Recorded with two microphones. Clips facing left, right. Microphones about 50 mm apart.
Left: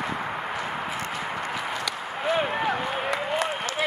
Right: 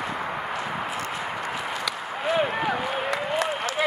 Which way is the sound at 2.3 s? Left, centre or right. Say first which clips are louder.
Right 2 dB; centre.